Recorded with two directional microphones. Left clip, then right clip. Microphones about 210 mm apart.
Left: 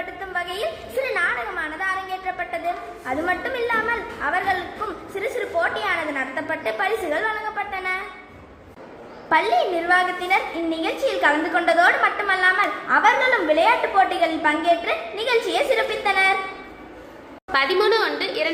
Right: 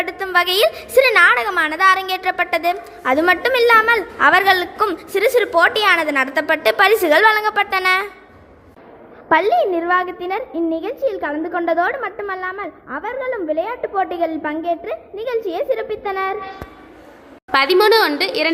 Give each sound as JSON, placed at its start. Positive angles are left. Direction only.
{"t": 0.0, "sound": "a woman's voice", "side_deg": -50}
{"t": 9.3, "sound": "a woman's voice", "side_deg": -40}
{"t": 17.5, "sound": "a woman's voice", "side_deg": -45}